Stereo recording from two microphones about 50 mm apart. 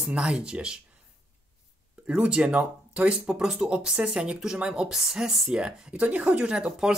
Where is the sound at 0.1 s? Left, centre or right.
Right.